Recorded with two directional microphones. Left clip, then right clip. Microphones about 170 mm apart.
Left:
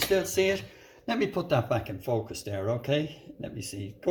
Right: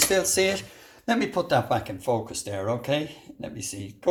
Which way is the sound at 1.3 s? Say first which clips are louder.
Right 6 dB; 10° right (ahead or behind).